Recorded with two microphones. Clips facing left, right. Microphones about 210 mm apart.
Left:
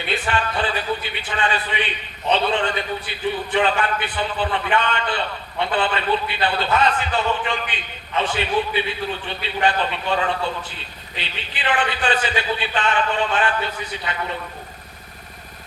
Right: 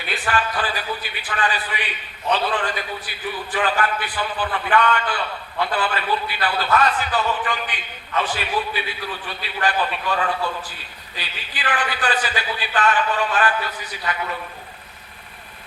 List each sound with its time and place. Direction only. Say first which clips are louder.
0.0 s a man's voice: left 1 dB; 25° left (ahead or behind)